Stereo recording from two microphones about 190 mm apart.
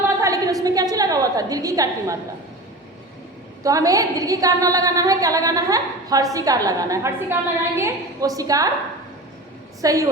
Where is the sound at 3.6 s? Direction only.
20° right (ahead or behind).